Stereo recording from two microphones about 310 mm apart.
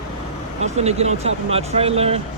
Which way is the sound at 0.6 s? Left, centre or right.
Right.